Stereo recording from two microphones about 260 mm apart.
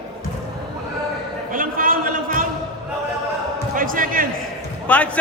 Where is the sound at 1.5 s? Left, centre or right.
Right.